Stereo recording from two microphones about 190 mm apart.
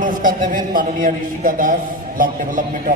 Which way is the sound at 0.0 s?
45° right (ahead or behind).